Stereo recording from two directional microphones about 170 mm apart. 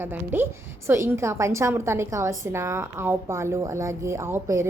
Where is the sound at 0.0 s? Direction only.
10° right (ahead or behind).